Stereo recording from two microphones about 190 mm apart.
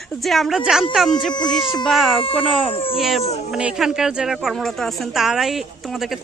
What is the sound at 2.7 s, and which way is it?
Speech, 30° left (ahead or behind).